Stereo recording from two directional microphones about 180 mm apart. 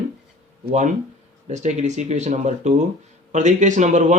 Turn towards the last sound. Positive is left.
turn(degrees=-40)  # may be behind; listen again after turning